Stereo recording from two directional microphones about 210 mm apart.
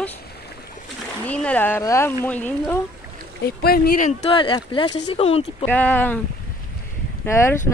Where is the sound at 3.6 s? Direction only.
45° left (ahead or behind).